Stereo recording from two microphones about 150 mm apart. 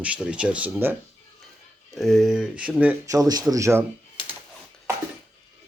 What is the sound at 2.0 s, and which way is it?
Speech, centre (ahead or behind).